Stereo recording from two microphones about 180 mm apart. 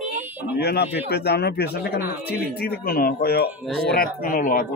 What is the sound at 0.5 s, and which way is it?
A man's voice, 60° left (ahead or behind).